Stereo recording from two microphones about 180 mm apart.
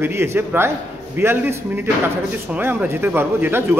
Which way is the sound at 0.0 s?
15° right (ahead or behind).